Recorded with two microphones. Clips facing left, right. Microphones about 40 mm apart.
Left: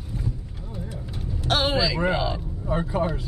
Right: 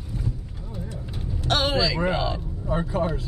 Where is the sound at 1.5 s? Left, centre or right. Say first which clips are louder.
Even; centre.